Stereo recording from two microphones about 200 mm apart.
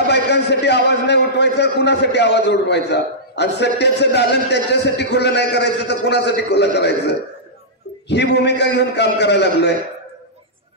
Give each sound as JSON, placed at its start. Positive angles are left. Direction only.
{"t": 0.0, "sound": "a man's voice", "side_deg": 55}